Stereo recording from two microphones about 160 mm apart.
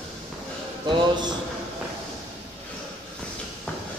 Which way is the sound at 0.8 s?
30° right (ahead or behind).